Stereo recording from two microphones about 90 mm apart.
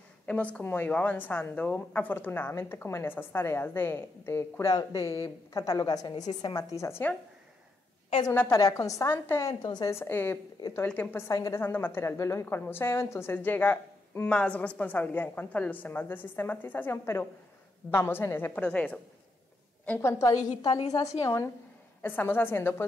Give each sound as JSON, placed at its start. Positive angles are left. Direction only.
{"t": 0.3, "sound": "a woman's voice", "side_deg": 15}
{"t": 8.3, "sound": "a woman's voice", "side_deg": 25}
{"t": 8.5, "sound": "a woman's voice", "side_deg": 40}
{"t": 9.1, "sound": "a woman's voice", "side_deg": 25}
{"t": 9.6, "sound": "a woman's voice", "side_deg": 55}
{"t": 9.8, "sound": "a woman's voice", "side_deg": 30}
{"t": 11.2, "sound": "a woman's voice", "side_deg": 40}
{"t": 11.6, "sound": "a woman's voice", "side_deg": 25}
{"t": 18.6, "sound": "a woman's voice", "side_deg": 15}
{"t": 20.0, "sound": "a woman's voice", "side_deg": 30}
{"t": 20.6, "sound": "a woman's voice", "side_deg": 55}
{"t": 21.0, "sound": "a woman's voice", "side_deg": 30}
{"t": 22.0, "sound": "a woman's voice", "side_deg": 20}